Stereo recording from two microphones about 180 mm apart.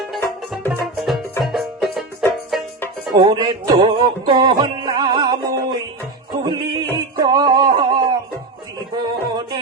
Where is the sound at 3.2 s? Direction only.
25° right (ahead or behind).